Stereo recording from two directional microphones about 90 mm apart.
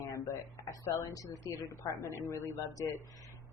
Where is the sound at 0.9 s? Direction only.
35° left (ahead or behind).